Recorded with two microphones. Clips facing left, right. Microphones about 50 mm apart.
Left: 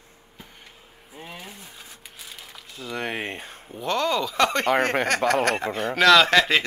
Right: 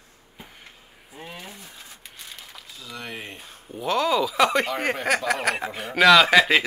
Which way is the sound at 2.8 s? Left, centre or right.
Left.